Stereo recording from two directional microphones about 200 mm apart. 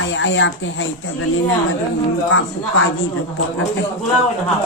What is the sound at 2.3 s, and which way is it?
Speech, 90° left.